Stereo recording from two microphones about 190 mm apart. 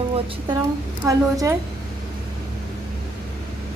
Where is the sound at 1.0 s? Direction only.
15° right (ahead or behind).